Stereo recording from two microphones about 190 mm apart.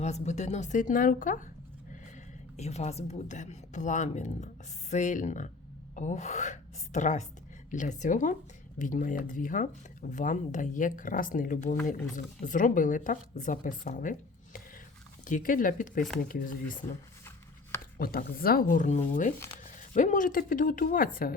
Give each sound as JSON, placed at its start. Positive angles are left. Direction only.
{"t": 0.0, "sound": "speech", "side_deg": 35}
{"t": 2.6, "sound": "speech", "side_deg": 35}
{"t": 15.3, "sound": "speech", "side_deg": 45}
{"t": 17.9, "sound": "speech", "side_deg": 50}
{"t": 19.6, "sound": "a sound", "side_deg": 40}
{"t": 20.5, "sound": "speech", "side_deg": 45}